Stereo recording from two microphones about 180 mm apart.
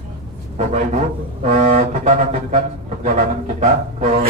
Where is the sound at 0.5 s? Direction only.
40° right (ahead or behind).